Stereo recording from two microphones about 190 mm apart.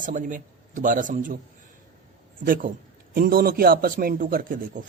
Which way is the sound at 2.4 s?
50° right (ahead or behind).